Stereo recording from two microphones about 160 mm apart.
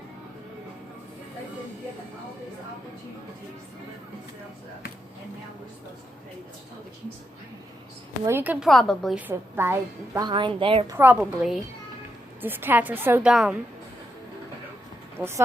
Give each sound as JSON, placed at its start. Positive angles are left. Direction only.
{"t": 8.2, "sound": "a woman's voice", "side_deg": -15}
{"t": 8.6, "sound": "a woman's voice", "side_deg": 0}
{"t": 9.1, "sound": "a woman's voice", "side_deg": -15}
{"t": 10.2, "sound": "a woman's voice", "side_deg": -30}
{"t": 10.8, "sound": "a woman's voice", "side_deg": -15}
{"t": 15.2, "sound": "a woman's voice", "side_deg": -10}